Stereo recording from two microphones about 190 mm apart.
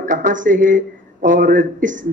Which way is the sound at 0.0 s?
40° right (ahead or behind).